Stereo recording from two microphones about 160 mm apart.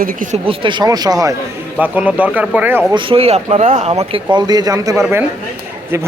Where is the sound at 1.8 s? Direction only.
10° right (ahead or behind).